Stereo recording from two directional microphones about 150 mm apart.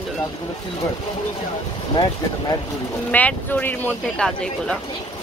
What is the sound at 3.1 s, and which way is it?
Speech, 10° left (ahead or behind).